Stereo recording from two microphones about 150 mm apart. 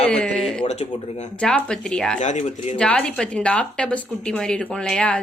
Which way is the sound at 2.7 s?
5° left (ahead or behind).